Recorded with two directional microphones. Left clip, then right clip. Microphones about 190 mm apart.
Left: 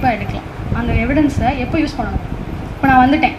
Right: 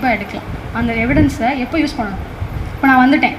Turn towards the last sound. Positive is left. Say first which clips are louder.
# even
turn(degrees=-40)  # may be behind; listen again after turning